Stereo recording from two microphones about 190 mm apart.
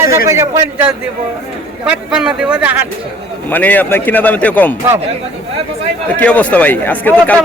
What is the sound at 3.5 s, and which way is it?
A man's voice, 10° left (ahead or behind).